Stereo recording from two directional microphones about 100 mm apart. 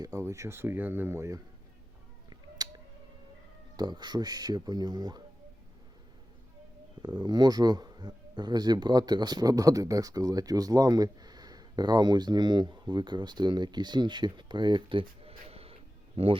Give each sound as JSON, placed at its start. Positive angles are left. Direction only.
{"t": 0.0, "sound": "speech", "side_deg": -30}
{"t": 2.6, "sound": "a sound", "side_deg": -40}
{"t": 3.8, "sound": "a man's voice", "side_deg": -45}
{"t": 7.0, "sound": "a man's voice", "side_deg": -45}